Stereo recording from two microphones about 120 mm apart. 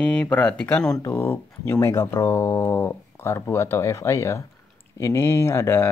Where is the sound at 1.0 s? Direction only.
20° left (ahead or behind).